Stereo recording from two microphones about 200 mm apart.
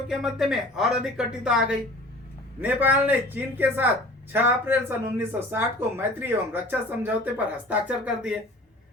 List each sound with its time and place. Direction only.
0.1 s speech: 5° right (ahead or behind)